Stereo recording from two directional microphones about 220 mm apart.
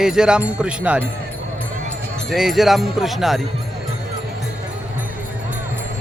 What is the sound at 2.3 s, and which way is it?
Speech, centre (ahead or behind).